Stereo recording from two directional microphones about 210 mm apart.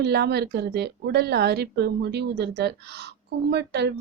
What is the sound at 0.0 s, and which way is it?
A woman's voice, 50° right (ahead or behind).